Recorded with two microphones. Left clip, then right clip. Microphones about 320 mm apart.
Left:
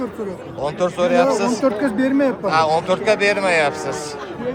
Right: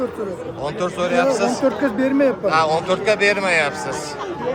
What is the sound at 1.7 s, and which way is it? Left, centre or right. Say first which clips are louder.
Speech: even; centre.